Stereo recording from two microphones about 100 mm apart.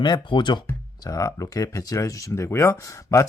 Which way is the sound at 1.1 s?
35° left (ahead or behind).